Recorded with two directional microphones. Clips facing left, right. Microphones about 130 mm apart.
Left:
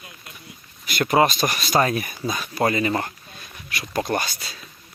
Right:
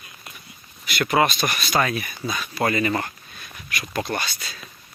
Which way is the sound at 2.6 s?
25° left (ahead or behind).